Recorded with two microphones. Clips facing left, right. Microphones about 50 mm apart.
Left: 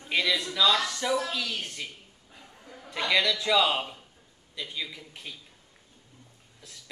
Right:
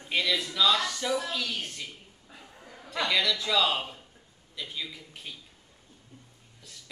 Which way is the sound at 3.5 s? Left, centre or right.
Centre.